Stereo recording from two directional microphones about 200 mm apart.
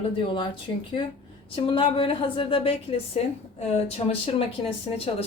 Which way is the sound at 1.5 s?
25° left (ahead or behind).